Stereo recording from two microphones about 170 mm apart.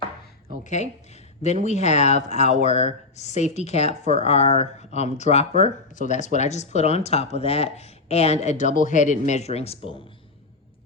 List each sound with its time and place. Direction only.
0.6 s speech: 45° left (ahead or behind)